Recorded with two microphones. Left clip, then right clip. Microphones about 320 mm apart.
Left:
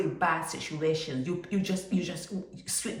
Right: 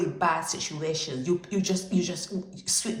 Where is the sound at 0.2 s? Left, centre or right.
Centre.